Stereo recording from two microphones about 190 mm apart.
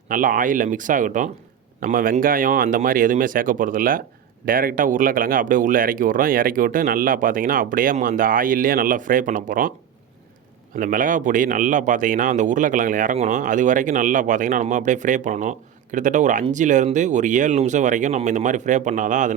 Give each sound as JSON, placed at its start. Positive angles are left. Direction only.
{"t": 0.1, "sound": "speech", "side_deg": -45}
{"t": 10.8, "sound": "speech", "side_deg": -45}